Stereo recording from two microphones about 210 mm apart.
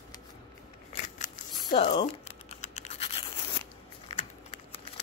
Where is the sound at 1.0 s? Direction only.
40° left (ahead or behind).